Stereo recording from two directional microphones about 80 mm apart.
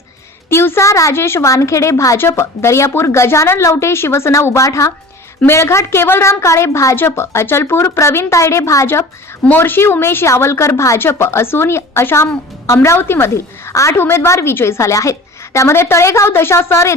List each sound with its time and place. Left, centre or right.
0.5 s a woman's voice: left